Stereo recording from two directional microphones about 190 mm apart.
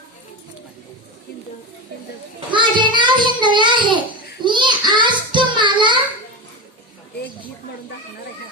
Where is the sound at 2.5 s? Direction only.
25° right (ahead or behind).